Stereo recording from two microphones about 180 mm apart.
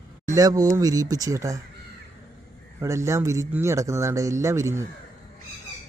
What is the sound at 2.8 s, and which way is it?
Speech, 15° right (ahead or behind).